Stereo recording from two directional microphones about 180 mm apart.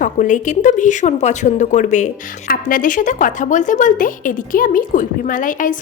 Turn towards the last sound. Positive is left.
turn(degrees=45)  # may be behind; listen again after turning